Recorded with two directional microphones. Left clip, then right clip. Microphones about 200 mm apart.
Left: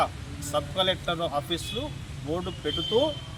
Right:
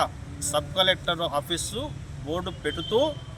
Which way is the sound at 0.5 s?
15° right (ahead or behind).